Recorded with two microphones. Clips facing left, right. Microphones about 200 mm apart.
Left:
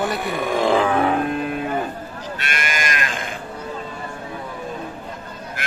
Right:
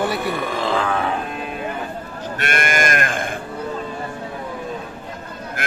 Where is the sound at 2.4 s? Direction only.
55° right (ahead or behind).